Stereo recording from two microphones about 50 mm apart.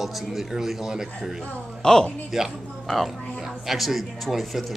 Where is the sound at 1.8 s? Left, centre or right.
Centre.